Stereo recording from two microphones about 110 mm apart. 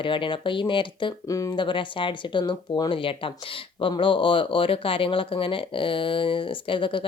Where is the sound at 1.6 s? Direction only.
50° left (ahead or behind).